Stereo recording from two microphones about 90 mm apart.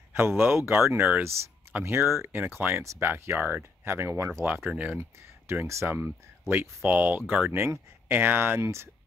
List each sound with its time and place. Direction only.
0.1 s speech: 25° right (ahead or behind)
2.4 s speech: 20° right (ahead or behind)
2.8 s speech: 35° right (ahead or behind)
3.1 s speech: 25° right (ahead or behind)
4.6 s speech: 15° right (ahead or behind)
5.5 s speech: 30° right (ahead or behind)